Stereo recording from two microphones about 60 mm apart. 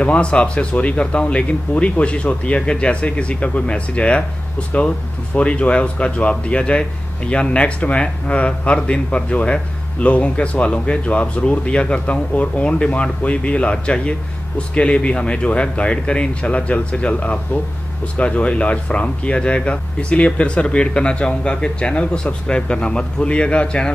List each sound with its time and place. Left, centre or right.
0.0 s speech: centre